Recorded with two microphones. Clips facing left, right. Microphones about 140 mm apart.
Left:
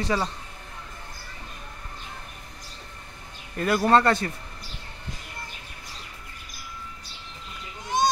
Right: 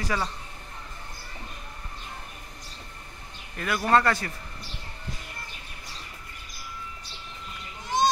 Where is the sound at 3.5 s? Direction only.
35° left (ahead or behind).